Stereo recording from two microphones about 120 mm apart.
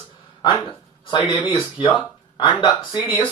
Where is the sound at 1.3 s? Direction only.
45° left (ahead or behind).